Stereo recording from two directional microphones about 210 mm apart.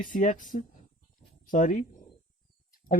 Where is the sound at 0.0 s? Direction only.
40° left (ahead or behind).